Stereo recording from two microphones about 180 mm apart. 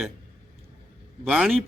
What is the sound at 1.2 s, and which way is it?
Speech, 5° right (ahead or behind).